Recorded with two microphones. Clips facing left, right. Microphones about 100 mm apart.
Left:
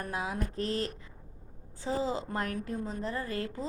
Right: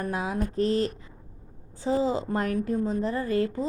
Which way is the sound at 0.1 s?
35° right (ahead or behind).